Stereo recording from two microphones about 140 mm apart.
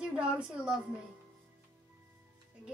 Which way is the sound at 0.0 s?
5° right (ahead or behind).